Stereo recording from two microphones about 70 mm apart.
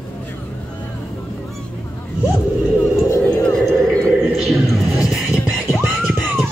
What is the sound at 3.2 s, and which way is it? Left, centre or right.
Music, centre.